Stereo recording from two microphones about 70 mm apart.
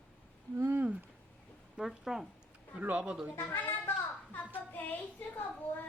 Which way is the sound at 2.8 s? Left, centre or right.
Centre.